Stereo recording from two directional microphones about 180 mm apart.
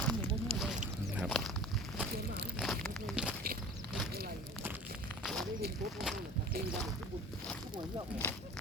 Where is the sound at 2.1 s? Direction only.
60° right (ahead or behind).